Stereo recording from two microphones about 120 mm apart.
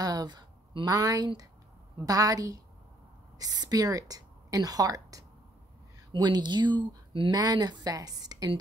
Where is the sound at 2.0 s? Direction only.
30° right (ahead or behind).